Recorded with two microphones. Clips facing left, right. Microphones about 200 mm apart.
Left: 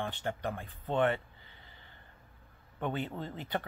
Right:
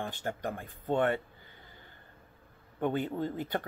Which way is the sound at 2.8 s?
45° right (ahead or behind).